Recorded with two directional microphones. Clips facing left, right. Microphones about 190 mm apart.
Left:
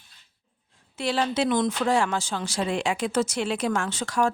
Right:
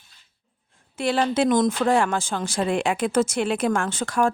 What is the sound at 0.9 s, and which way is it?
Speech, 55° right (ahead or behind).